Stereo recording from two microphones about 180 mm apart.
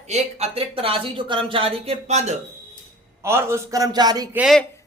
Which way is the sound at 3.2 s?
15° right (ahead or behind).